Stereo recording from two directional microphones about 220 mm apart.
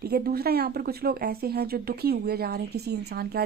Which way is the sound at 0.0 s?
45° right (ahead or behind).